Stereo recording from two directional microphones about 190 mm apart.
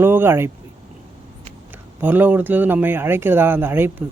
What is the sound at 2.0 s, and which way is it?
Speech, 10° right (ahead or behind).